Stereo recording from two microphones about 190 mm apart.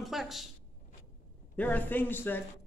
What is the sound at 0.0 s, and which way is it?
Speech, centre (ahead or behind).